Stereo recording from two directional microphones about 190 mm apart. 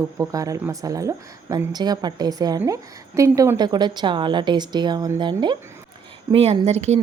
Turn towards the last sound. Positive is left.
turn(degrees=-35)  # may be behind; listen again after turning